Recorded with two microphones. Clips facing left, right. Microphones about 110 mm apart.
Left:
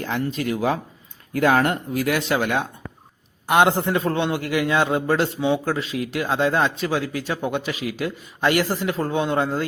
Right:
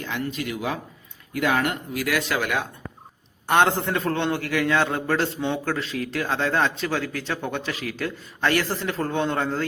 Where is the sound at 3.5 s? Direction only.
10° left (ahead or behind).